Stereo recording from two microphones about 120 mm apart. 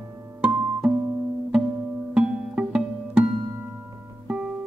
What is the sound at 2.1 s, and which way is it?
Music, 5° right (ahead or behind).